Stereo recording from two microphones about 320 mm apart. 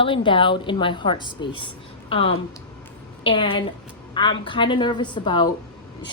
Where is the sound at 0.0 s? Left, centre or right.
Centre.